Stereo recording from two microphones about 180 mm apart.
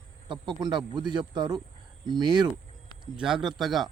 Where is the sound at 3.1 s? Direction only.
5° right (ahead or behind).